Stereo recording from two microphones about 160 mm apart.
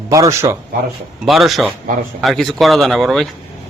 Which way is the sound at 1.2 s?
Centre (ahead or behind).